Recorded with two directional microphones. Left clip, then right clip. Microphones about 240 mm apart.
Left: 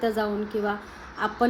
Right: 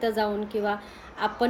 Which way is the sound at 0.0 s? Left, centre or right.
Centre.